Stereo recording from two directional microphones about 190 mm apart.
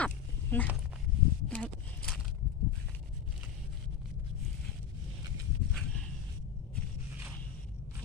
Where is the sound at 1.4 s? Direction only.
5° left (ahead or behind).